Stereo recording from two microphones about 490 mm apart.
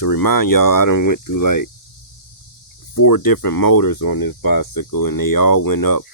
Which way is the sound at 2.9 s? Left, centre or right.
Left.